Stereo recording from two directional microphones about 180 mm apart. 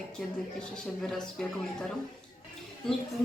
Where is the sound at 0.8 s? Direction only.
5° left (ahead or behind).